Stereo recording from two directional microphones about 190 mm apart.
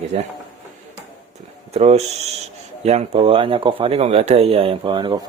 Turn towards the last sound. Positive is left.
turn(degrees=-25)  # may be behind; listen again after turning